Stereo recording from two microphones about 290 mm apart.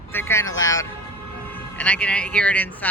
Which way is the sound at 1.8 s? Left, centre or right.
Centre.